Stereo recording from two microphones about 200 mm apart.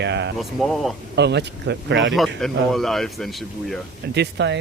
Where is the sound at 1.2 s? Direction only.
60° right (ahead or behind).